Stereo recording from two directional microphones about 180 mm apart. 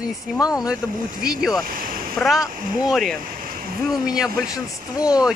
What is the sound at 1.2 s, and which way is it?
Speech, 5° right (ahead or behind).